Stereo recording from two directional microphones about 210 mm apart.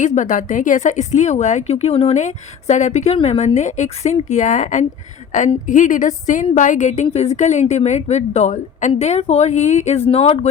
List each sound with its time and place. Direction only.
0.0 s speech: 35° left (ahead or behind)